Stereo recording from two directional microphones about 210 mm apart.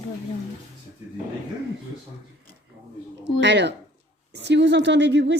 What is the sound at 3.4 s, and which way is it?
Speech, 55° right (ahead or behind).